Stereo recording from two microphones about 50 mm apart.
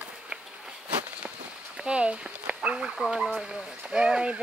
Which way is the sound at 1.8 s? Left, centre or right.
Right.